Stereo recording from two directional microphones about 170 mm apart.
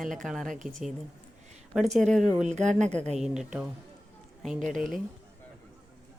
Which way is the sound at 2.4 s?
45° right (ahead or behind).